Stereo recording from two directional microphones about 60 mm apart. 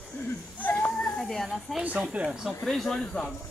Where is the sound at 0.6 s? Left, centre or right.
Left.